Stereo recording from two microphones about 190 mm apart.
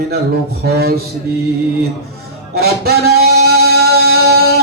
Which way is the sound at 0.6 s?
55° right (ahead or behind).